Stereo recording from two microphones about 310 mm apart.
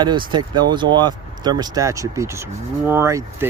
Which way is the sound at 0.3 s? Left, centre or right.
Centre.